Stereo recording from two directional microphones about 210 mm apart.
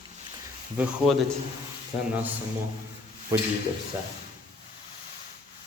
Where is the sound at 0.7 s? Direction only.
5° right (ahead or behind).